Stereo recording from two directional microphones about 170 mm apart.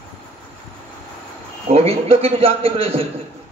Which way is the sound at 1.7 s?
35° right (ahead or behind).